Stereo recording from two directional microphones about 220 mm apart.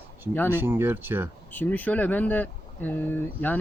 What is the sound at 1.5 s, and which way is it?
Speech, 10° left (ahead or behind).